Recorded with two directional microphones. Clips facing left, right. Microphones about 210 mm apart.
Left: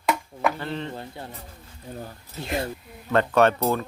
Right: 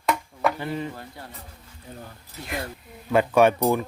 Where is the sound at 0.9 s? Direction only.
25° left (ahead or behind).